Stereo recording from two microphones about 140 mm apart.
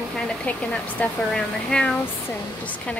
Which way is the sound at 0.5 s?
10° left (ahead or behind).